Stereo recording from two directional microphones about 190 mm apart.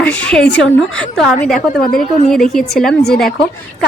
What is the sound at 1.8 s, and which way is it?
Speech, 50° left (ahead or behind).